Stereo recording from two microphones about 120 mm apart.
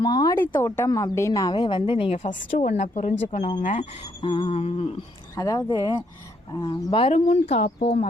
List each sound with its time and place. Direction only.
0.0 s speech: 35° left (ahead or behind)
0.3 s speech: 20° left (ahead or behind)
0.9 s a woman's voice: 30° left (ahead or behind); by 2.1 s 50° left (ahead or behind)
2.1 s speech: 85° left
3.6 s speech: 70° left (ahead or behind)
4.2 s a sound: 45° left (ahead or behind)
5.4 s speech: 30° left (ahead or behind)
6.5 s a sound: 40° left (ahead or behind)
7.1 s speech: 65° left (ahead or behind)